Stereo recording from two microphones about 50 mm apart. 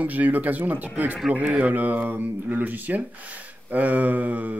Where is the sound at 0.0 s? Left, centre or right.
Right.